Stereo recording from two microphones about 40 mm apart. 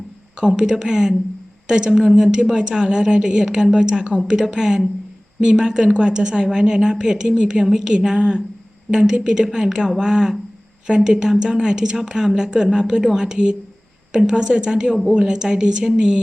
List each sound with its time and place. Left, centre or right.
0.3 s a woman's voice: right